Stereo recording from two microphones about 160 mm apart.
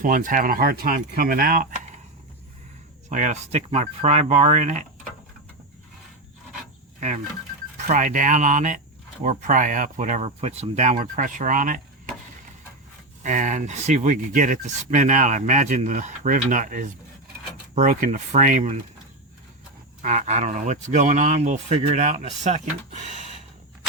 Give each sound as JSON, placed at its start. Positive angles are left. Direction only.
{"t": 0.0, "sound": "speech", "side_deg": -55}
{"t": 3.1, "sound": "speech", "side_deg": -50}
{"t": 7.9, "sound": "speech", "side_deg": -55}
{"t": 13.2, "sound": "speech", "side_deg": -50}
{"t": 20.0, "sound": "speech", "side_deg": -50}